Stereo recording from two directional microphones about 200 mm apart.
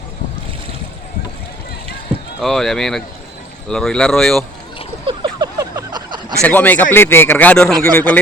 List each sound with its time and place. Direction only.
2.4 s speech: centre (ahead or behind)
5.0 s a sound: 20° right (ahead or behind)
6.4 s speech: 10° left (ahead or behind)